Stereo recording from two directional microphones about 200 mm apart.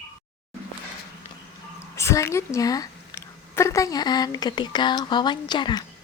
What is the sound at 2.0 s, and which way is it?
A woman's voice, 15° left (ahead or behind).